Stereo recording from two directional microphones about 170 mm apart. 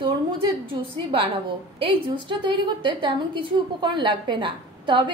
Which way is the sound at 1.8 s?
30° right (ahead or behind).